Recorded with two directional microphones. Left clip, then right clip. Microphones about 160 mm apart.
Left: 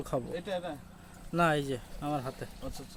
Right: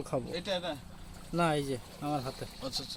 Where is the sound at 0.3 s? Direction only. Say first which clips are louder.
Right 1 dB; 35° left (ahead or behind).